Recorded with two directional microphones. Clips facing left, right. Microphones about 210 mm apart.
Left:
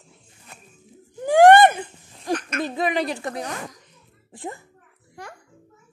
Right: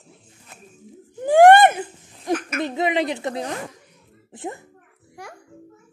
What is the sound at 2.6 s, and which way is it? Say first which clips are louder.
A child's voice: right 2 dB; 20° right (ahead or behind).